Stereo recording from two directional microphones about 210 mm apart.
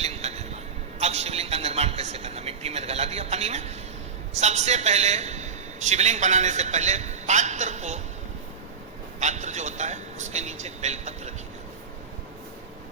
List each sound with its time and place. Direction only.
0.0 s a sound: 30° right (ahead or behind)
4.4 s a man's voice: 30° right (ahead or behind)
9.2 s a man's voice: 35° right (ahead or behind)